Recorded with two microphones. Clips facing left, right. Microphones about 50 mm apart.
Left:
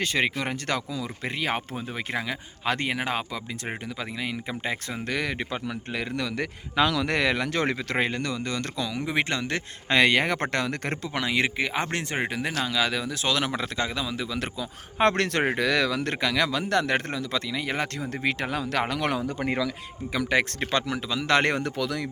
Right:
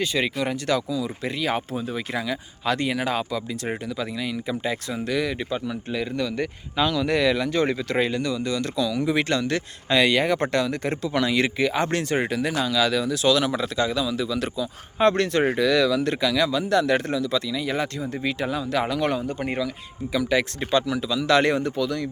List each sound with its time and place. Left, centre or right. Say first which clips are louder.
0.0 s speech: right 2 dB; left
7.9 s speech: right 3 dB; left
8.9 s speech: right 3 dB; left
9.9 s speech: right 1 dB; left
11.1 s speech: right 3 dB; left
14.9 s speech: right 3 dB; left
15.5 s speech: right 4 dB; left
18.1 s speech: right 1 dB; left
20.6 s speech: right 4 dB; left
21.6 s speech: right 3 dB; left